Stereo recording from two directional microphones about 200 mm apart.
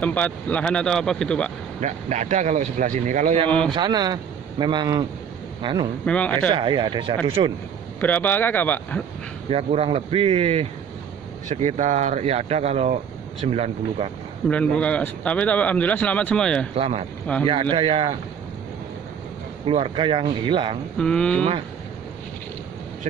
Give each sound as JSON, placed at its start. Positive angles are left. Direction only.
{"t": 0.0, "sound": "speech", "side_deg": 10}
{"t": 1.8, "sound": "speech", "side_deg": -35}
{"t": 3.4, "sound": "speech", "side_deg": 5}
{"t": 3.7, "sound": "speech", "side_deg": -20}
{"t": 6.0, "sound": "a man's voice", "side_deg": 5}
{"t": 6.5, "sound": "speech", "side_deg": -20}
{"t": 8.0, "sound": "a man's voice", "side_deg": 10}
{"t": 9.5, "sound": "speech", "side_deg": -30}
{"t": 14.5, "sound": "a man's voice", "side_deg": 5}
{"t": 16.7, "sound": "speech", "side_deg": -30}
{"t": 19.6, "sound": "speech", "side_deg": -25}
{"t": 21.0, "sound": "speech", "side_deg": 5}